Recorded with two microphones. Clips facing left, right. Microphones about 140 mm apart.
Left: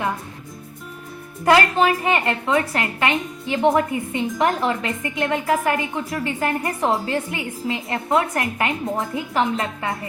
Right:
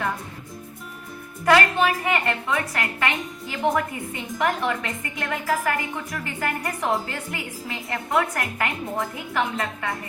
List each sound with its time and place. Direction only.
1.8 s a woman's voice: 25° left (ahead or behind)